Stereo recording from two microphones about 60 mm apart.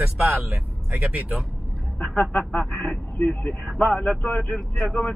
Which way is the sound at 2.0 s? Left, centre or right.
Centre.